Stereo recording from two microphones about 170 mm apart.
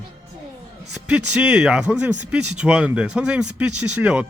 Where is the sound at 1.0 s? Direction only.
5° right (ahead or behind).